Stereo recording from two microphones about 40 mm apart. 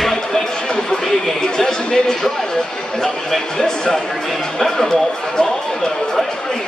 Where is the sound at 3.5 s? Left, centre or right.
Centre.